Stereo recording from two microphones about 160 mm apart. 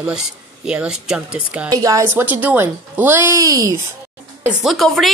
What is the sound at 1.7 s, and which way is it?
A woman's voice, 20° right (ahead or behind).